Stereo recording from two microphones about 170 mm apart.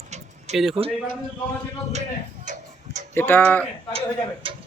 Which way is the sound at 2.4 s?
45° right (ahead or behind).